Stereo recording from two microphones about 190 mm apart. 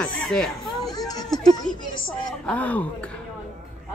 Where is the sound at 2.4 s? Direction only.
10° left (ahead or behind).